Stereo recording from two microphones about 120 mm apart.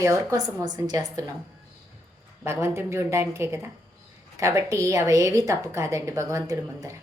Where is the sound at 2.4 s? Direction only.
20° right (ahead or behind).